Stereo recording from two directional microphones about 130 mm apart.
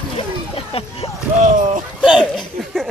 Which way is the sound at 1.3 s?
70° right (ahead or behind).